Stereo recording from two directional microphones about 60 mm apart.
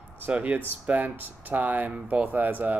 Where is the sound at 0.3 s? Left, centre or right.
Right.